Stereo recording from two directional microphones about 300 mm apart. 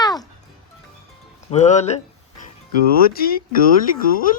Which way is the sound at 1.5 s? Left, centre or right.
Left.